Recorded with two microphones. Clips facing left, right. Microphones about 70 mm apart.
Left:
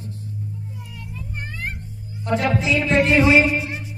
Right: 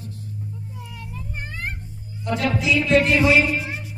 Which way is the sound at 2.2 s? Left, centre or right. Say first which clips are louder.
Left 2 dB; left.